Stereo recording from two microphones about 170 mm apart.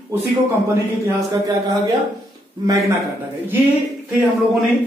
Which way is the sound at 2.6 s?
20° right (ahead or behind).